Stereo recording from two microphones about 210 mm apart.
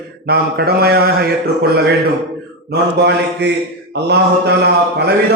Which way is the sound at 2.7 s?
55° right (ahead or behind).